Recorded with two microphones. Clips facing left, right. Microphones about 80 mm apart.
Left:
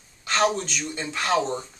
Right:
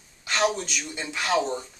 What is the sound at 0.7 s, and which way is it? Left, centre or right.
Speech, centre.